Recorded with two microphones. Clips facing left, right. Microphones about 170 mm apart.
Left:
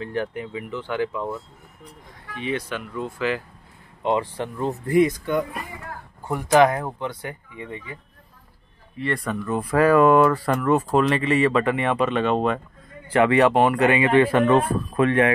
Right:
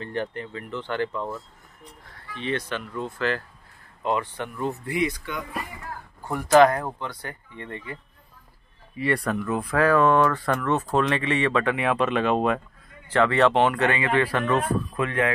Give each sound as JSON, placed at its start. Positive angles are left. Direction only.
{"t": 0.0, "sound": "a man's voice", "side_deg": 5}
{"t": 4.0, "sound": "speech", "side_deg": 30}
{"t": 4.8, "sound": "speech", "side_deg": 50}
{"t": 6.2, "sound": "a man's voice", "side_deg": 20}
{"t": 9.7, "sound": "speech", "side_deg": 10}
{"t": 13.1, "sound": "a man's voice", "side_deg": 15}